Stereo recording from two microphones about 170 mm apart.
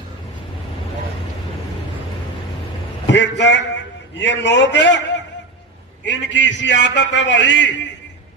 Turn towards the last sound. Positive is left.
turn(degrees=90)